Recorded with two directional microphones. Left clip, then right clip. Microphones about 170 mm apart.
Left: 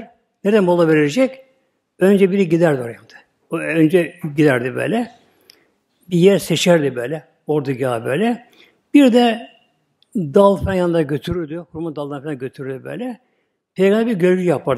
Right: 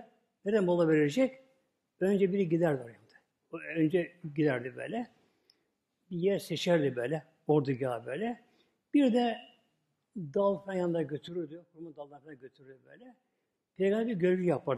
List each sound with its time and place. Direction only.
0.4 s a man's voice: 15° left (ahead or behind)
6.0 s a man's voice: 15° left (ahead or behind)
6.8 s a man's voice: 5° left (ahead or behind)
7.1 s a man's voice: 10° right (ahead or behind)